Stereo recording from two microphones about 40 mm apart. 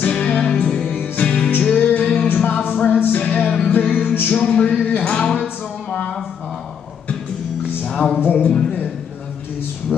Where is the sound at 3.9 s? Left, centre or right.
Left.